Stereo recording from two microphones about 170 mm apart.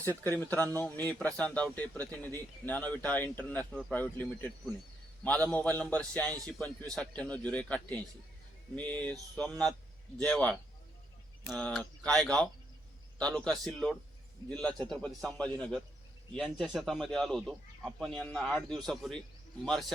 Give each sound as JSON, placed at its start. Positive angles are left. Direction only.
{"t": 0.0, "sound": "a man's voice", "side_deg": 10}